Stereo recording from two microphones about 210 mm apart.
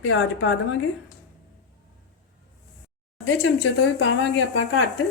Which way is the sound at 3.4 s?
60° left (ahead or behind).